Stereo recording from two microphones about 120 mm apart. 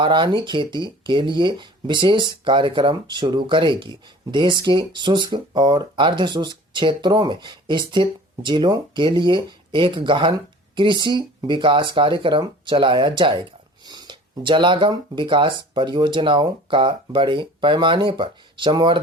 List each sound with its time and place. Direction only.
0.0 s speech: 40° right (ahead or behind)